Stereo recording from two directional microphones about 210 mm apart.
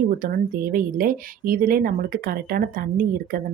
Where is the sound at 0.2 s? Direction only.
45° right (ahead or behind).